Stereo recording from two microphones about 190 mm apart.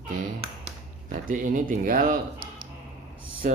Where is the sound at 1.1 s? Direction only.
45° right (ahead or behind).